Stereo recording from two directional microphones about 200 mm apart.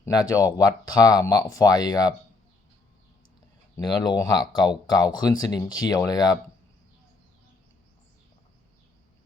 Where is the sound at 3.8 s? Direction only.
20° left (ahead or behind).